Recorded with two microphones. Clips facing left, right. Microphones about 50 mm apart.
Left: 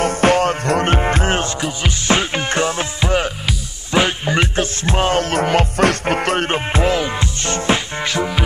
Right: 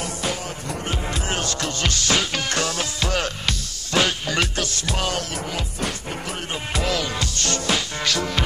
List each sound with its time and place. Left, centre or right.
0.0 s music: left
1.6 s music: centre
2.1 s music: left
5.3 s music: left
6.7 s music: left